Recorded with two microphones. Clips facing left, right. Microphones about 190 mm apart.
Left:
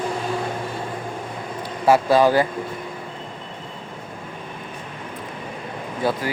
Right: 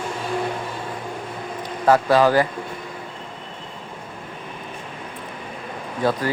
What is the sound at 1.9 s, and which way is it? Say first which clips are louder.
Speech: even; 15° left (ahead or behind).